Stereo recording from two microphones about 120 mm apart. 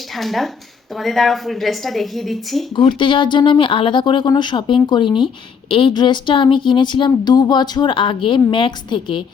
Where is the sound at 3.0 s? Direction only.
45° left (ahead or behind).